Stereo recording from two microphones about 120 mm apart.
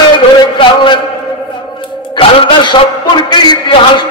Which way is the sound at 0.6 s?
45° left (ahead or behind).